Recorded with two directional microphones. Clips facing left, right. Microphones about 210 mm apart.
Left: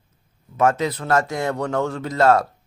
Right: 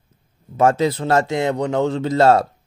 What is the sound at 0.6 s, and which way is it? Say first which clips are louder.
A man's voice: right 3 dB; 30° right (ahead or behind).